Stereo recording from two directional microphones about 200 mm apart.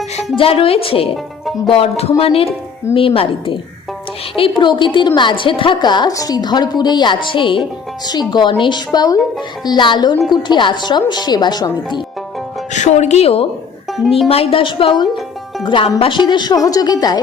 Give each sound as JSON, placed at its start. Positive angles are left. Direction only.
{"t": 0.3, "sound": "a woman's voice", "side_deg": 30}
{"t": 1.1, "sound": "speech", "side_deg": 0}
{"t": 1.7, "sound": "a woman's voice", "side_deg": 30}
{"t": 12.7, "sound": "speech", "side_deg": 35}
{"t": 13.9, "sound": "speech", "side_deg": 0}
{"t": 14.3, "sound": "a woman's voice", "side_deg": 30}